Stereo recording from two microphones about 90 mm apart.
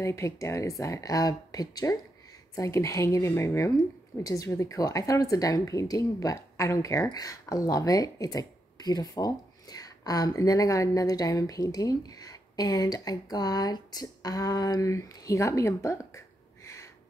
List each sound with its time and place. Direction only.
0.0 s speech: 35° left (ahead or behind)